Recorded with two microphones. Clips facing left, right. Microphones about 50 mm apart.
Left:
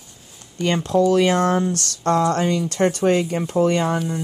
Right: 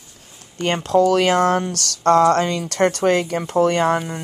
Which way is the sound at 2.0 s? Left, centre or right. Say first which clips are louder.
Right 4 dB; right.